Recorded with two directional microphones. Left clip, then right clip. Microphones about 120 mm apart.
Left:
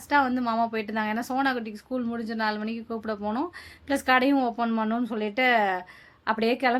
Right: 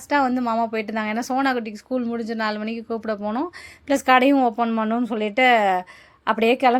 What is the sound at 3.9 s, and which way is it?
A woman's voice, 50° right (ahead or behind).